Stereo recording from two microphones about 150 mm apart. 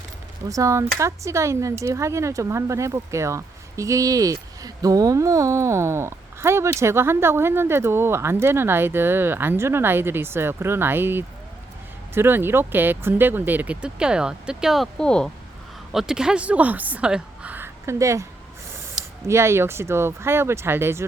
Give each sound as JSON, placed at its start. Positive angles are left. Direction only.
{"t": 0.4, "sound": "speech", "side_deg": -20}
{"t": 19.3, "sound": "speech", "side_deg": -15}